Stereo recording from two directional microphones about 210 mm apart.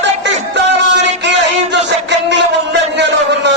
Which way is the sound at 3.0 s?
55° right (ahead or behind).